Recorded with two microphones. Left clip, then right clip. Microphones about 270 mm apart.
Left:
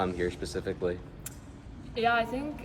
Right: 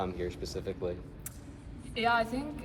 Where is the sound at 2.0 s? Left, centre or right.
Centre.